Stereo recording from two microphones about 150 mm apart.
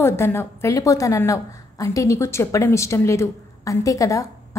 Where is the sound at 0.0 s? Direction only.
15° left (ahead or behind).